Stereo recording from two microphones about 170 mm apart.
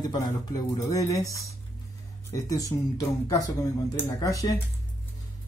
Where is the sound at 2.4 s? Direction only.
20° left (ahead or behind).